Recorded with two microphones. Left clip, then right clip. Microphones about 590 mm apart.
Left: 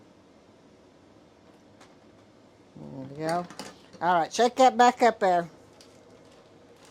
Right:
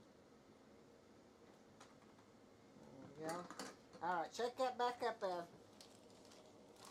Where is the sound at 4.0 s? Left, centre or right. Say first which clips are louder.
Left 19 dB; left.